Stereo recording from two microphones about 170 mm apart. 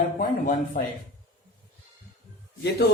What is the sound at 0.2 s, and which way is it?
Speech, 55° left (ahead or behind).